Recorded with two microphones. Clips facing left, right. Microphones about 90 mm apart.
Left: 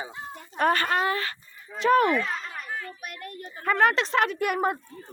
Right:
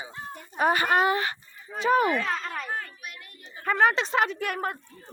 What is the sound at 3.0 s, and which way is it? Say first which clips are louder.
Speech: left 6 dB; 50° left (ahead or behind).